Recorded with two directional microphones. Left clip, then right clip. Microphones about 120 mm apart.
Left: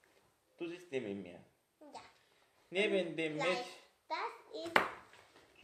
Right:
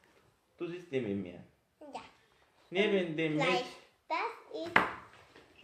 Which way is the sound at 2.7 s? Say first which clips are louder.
Right 3 dB; 30° left (ahead or behind).